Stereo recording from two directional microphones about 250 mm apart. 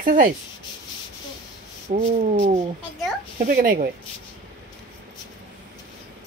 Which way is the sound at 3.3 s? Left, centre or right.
Right.